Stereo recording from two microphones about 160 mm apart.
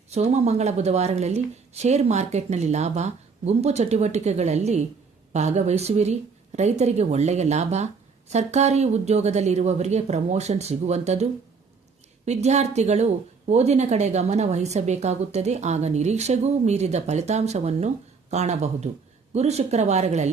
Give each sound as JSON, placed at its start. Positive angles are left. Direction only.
{"t": 0.1, "sound": "a woman's voice", "side_deg": -45}